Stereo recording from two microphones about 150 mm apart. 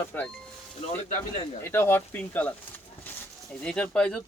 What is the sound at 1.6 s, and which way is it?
Speech, 15° left (ahead or behind).